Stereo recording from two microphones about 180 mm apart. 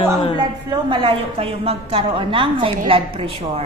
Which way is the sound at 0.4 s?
25° right (ahead or behind).